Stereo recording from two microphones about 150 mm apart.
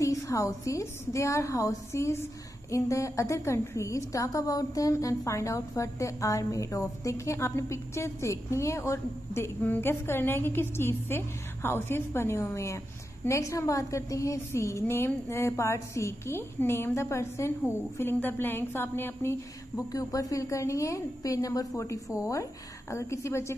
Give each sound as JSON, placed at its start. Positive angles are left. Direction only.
{"t": 0.0, "sound": "a woman's voice", "side_deg": 20}